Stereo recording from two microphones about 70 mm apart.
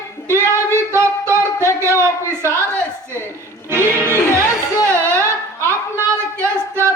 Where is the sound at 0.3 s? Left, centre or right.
Right.